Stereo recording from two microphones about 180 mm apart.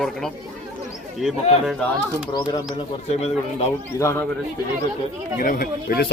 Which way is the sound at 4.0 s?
15° left (ahead or behind).